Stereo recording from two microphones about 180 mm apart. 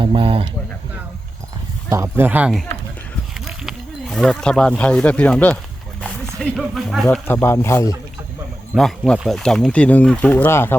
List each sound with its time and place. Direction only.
0.0 s speech: 30° right (ahead or behind)
1.9 s speech: 15° right (ahead or behind); by 5.5 s 10° left (ahead or behind)
6.0 s a sound: 5° left (ahead or behind)
6.6 s speech: centre (ahead or behind)
7.3 s speech: 15° left (ahead or behind)
8.7 s speech: centre (ahead or behind)